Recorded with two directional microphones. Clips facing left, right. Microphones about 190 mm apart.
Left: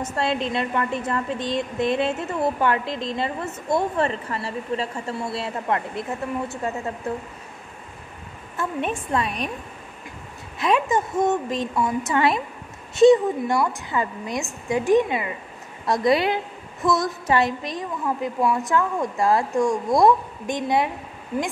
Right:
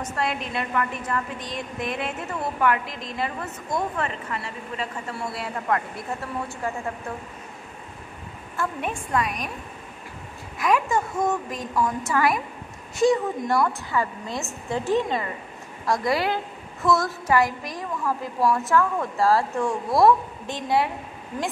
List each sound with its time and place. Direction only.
0.0 s a woman's voice: 25° left (ahead or behind)
8.5 s a woman's voice: 25° left (ahead or behind)
10.6 s a woman's voice: 20° left (ahead or behind)
11.7 s speech: 10° left (ahead or behind)
12.1 s a woman's voice: 25° left (ahead or behind)
13.4 s speech: 5° left (ahead or behind)
13.8 s a woman's voice: 20° left (ahead or behind)